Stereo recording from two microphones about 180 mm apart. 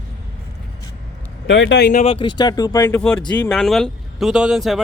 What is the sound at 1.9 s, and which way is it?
Speech, 45° left (ahead or behind).